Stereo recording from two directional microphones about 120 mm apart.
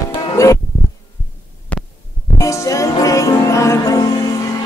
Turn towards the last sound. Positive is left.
turn(degrees=25)  # may be behind; listen again after turning